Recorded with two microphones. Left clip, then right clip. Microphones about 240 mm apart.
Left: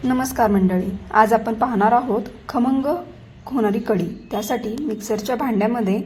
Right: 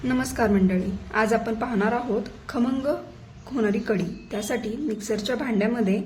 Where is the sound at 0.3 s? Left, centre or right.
Centre.